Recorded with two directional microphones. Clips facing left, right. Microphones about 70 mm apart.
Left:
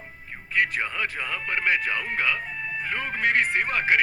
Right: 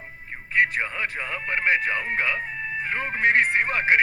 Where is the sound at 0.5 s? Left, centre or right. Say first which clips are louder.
Right 3 dB; right.